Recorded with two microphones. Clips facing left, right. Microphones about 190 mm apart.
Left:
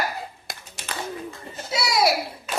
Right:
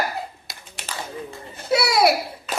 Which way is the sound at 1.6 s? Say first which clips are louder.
Right 5 dB; 60° right (ahead or behind).